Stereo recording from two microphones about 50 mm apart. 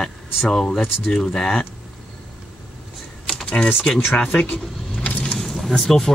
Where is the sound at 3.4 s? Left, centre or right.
Left.